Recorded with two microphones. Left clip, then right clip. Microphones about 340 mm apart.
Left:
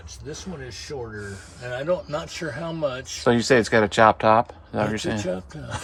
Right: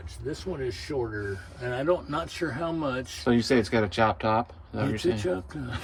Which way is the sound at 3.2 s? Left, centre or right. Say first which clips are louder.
Left 6 dB; left.